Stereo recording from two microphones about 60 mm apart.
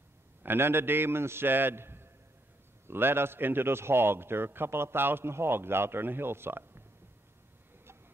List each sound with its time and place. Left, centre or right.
0.4 s a man's voice: right